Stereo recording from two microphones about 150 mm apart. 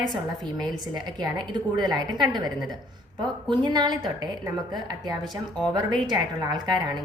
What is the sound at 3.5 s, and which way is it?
A woman's voice, 30° right (ahead or behind).